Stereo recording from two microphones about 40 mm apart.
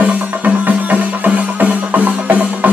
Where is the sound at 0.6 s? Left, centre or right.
Right.